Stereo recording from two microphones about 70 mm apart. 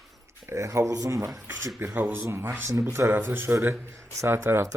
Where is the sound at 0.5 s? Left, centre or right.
Right.